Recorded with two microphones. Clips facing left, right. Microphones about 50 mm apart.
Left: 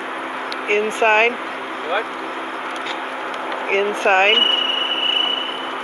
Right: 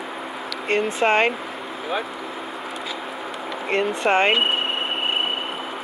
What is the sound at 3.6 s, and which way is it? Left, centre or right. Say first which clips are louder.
Speech: left 3 dB; left.